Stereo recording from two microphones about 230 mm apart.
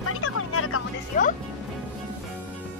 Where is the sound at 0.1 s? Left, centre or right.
Left.